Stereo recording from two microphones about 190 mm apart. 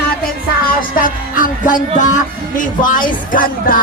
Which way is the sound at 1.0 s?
45° left (ahead or behind).